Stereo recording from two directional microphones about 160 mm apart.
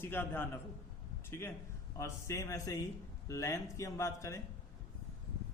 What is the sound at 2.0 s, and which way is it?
A man's voice, 20° left (ahead or behind).